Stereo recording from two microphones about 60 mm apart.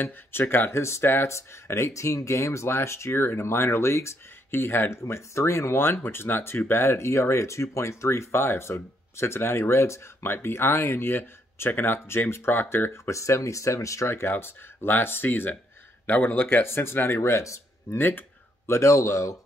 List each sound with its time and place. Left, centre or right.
0.0 s speech: left
14.3 s speech: left
17.9 s speech: left
18.7 s speech: left